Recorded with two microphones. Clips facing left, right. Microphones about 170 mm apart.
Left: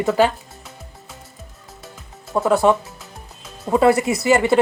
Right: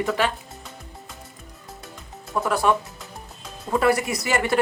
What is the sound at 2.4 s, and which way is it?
Speech, 25° left (ahead or behind).